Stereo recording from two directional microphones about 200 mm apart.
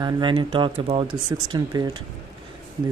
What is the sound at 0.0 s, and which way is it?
Speech, 25° right (ahead or behind).